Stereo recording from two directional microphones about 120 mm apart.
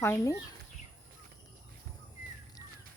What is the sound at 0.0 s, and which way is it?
Speech, 20° left (ahead or behind).